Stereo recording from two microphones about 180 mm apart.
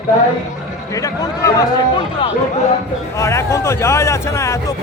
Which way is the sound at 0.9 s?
20° left (ahead or behind).